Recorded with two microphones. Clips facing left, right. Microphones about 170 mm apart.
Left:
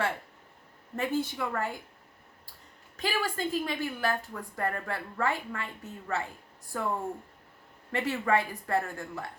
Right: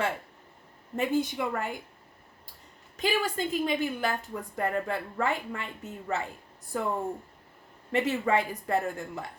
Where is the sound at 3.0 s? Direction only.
20° right (ahead or behind).